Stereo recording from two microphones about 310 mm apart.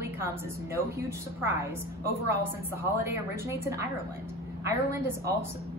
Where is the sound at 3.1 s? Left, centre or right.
Centre.